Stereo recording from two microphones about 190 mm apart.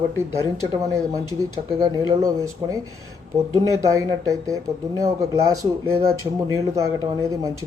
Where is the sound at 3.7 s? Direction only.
15° right (ahead or behind).